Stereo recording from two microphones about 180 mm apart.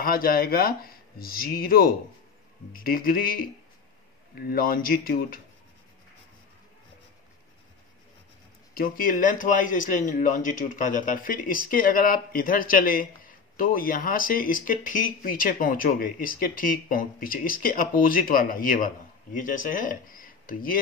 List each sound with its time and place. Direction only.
0.0 s speech: 55° left (ahead or behind)
8.7 s speech: 50° left (ahead or behind)